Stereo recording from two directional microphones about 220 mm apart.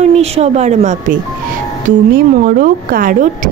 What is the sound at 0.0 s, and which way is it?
Speech, 30° right (ahead or behind).